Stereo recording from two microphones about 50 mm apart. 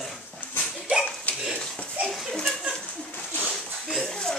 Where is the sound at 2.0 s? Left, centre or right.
Right.